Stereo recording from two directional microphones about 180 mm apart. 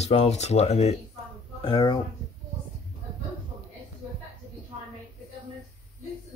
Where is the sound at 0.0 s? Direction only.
35° left (ahead or behind).